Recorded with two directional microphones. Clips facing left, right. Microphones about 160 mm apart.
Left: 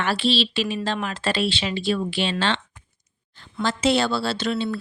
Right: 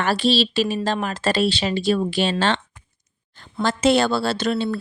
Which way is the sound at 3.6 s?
50° right (ahead or behind).